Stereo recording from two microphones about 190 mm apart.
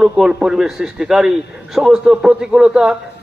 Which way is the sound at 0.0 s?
5° right (ahead or behind).